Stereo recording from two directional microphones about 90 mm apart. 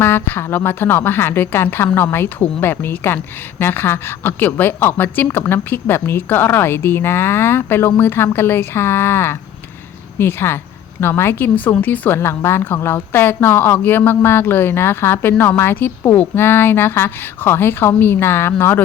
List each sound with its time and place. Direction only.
0.0 s a woman's voice: 25° left (ahead or behind)